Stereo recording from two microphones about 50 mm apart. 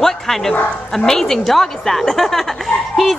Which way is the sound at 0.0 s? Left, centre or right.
Centre.